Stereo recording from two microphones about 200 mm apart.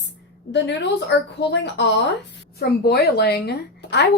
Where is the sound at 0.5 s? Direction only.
60° left (ahead or behind).